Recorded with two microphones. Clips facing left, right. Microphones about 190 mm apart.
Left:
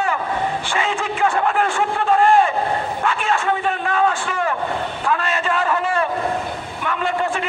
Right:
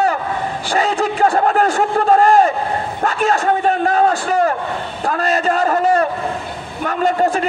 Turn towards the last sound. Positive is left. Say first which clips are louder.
# right 6 dB
turn(degrees=-40)  # may be behind; listen again after turning